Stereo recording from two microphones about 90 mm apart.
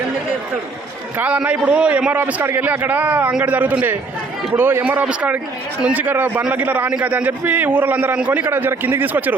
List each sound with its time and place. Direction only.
1.5 s a man's voice: 15° right (ahead or behind)